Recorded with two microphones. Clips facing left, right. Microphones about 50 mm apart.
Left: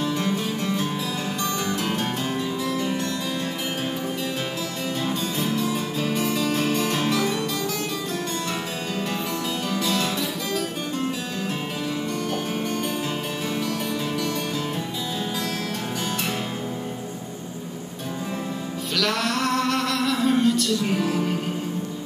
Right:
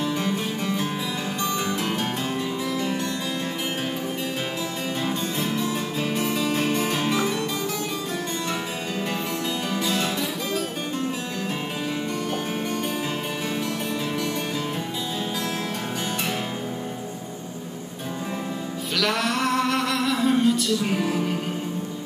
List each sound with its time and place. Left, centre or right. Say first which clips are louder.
1.4 s music: right 2 dB; centre
5.0 s music: left 1 dB; centre
9.8 s music: left 1 dB; centre
18.9 s a sound: even; centre